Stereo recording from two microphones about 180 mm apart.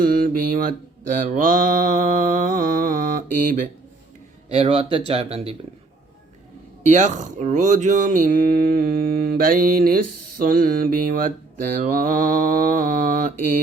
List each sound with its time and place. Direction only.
0.0 s mantra: 50° right (ahead or behind)
4.4 s speech: 35° right (ahead or behind)
6.8 s speech: 45° right (ahead or behind)